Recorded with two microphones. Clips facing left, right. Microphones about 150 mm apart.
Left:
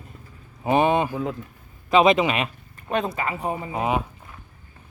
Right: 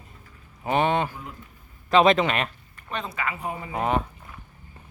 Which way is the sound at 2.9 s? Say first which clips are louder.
Left 8 dB; 50° left (ahead or behind).